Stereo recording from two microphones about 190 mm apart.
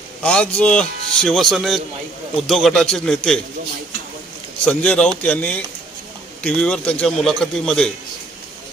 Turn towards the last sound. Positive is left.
turn(degrees=5)  # may be behind; listen again after turning